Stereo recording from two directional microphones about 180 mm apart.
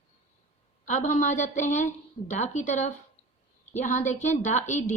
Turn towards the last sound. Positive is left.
turn(degrees=40)  # may be behind; listen again after turning